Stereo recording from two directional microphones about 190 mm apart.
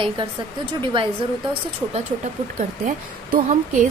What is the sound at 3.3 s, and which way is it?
Speech, 45° right (ahead or behind).